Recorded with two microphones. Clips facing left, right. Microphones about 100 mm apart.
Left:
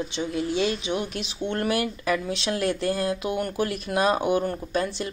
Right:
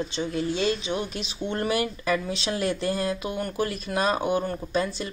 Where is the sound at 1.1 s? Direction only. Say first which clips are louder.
Left 1 dB; 60° left (ahead or behind).